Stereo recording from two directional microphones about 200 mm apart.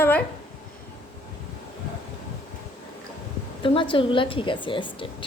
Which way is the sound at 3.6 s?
25° left (ahead or behind).